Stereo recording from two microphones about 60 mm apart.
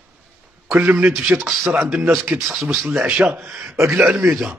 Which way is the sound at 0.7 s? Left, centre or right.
Right.